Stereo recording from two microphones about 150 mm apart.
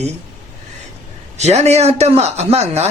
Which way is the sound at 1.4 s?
50° right (ahead or behind).